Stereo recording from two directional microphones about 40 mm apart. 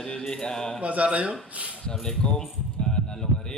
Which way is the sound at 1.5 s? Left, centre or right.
Right.